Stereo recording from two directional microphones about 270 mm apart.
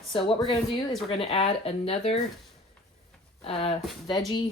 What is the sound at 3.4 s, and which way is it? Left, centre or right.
Speech, left.